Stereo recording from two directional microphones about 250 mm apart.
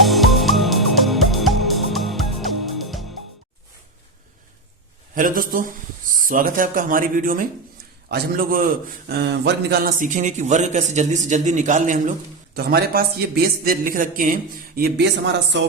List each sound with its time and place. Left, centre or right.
0.0 s music: centre
5.1 s a man's voice: right